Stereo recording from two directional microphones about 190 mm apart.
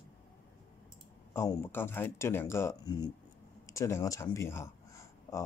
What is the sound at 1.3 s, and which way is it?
Speech, 15° left (ahead or behind).